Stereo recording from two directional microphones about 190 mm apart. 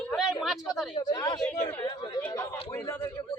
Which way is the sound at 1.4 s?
10° left (ahead or behind).